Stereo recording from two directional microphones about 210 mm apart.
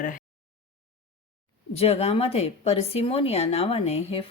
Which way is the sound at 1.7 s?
30° left (ahead or behind).